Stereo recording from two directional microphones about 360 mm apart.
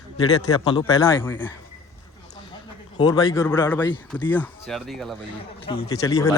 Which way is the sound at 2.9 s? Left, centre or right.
Centre.